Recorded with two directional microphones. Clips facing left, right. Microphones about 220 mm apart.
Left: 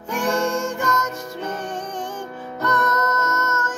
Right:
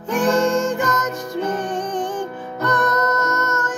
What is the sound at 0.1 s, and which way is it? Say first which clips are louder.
Music: right 5 dB; 20° right (ahead or behind).